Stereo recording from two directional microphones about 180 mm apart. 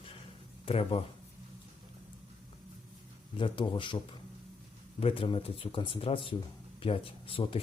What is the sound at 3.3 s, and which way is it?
Speech, 25° left (ahead or behind).